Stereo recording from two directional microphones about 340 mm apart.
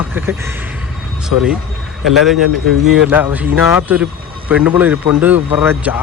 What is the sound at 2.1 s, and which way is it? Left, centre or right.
Speech, centre.